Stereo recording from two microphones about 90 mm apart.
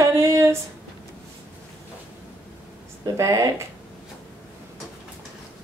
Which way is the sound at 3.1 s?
35° right (ahead or behind).